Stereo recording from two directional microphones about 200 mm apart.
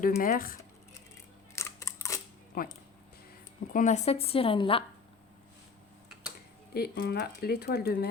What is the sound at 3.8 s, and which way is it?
Speech, 35° left (ahead or behind).